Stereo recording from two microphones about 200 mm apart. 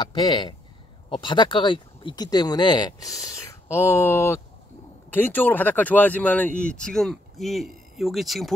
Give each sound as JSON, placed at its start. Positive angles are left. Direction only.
{"t": 0.0, "sound": "speech", "side_deg": 20}